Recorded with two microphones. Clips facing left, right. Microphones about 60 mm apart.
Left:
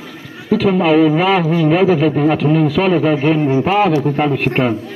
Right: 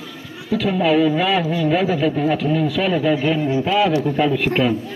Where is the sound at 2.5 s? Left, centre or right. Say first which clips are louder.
Left 5 dB; left.